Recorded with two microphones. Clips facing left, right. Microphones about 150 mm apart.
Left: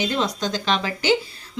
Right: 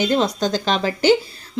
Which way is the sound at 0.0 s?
35° right (ahead or behind).